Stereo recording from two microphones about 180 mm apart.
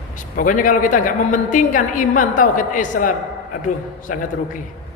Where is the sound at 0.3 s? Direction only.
50° left (ahead or behind).